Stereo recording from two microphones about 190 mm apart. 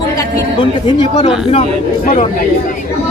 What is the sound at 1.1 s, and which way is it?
Speech, 30° left (ahead or behind).